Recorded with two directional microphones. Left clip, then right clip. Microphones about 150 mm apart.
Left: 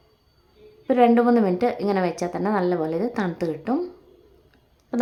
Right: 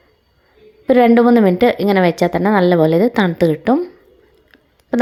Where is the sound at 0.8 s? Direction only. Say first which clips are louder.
Right 7 dB; 40° right (ahead or behind).